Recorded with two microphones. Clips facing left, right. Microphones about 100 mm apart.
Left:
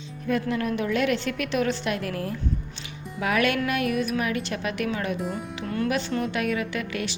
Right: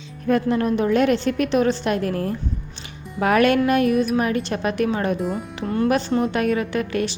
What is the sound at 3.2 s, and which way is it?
Music, 45° right (ahead or behind).